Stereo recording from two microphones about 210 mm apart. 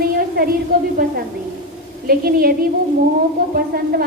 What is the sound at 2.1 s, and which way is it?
Speech, 45° right (ahead or behind).